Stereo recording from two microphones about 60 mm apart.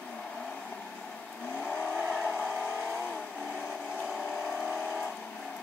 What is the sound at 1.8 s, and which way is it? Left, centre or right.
Vehicle, right.